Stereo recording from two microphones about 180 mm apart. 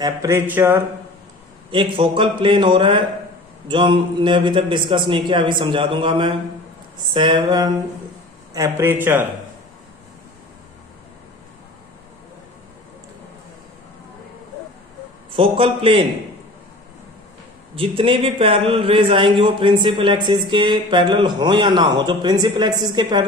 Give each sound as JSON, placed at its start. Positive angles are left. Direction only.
{"t": 0.0, "sound": "speech", "side_deg": -15}
{"t": 1.7, "sound": "a man's voice", "side_deg": -30}
{"t": 15.3, "sound": "a man's voice", "side_deg": -30}
{"t": 17.7, "sound": "a man's voice", "side_deg": -30}